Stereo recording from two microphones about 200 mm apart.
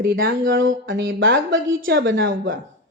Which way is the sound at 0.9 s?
70° right (ahead or behind).